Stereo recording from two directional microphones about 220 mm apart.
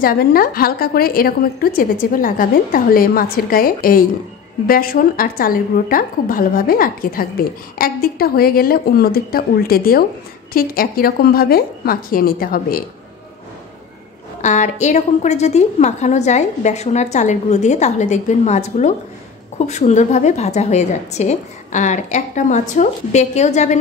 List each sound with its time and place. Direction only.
0.0 s a woman's voice: 40° left (ahead or behind)
14.4 s a woman's voice: 35° left (ahead or behind)